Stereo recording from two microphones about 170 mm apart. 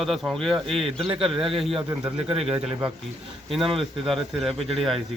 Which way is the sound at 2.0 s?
5° right (ahead or behind).